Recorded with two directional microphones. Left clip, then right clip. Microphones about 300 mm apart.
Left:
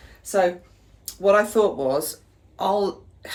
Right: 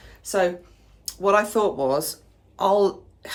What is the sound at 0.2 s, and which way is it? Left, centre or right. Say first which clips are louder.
A woman's voice: left 1 dB; centre.